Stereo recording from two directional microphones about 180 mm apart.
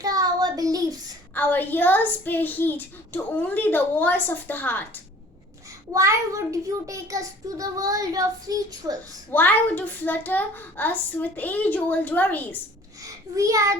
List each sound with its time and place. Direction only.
0.0 s child singing: 20° right (ahead or behind)
1.3 s a woman's voice: 10° left (ahead or behind)
5.9 s a child's voice: 15° right (ahead or behind)
9.3 s a woman's voice: 10° left (ahead or behind)
13.0 s a child's voice: 20° right (ahead or behind)